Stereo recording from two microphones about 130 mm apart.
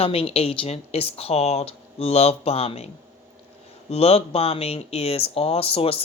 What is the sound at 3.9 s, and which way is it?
Speech, 50° left (ahead or behind).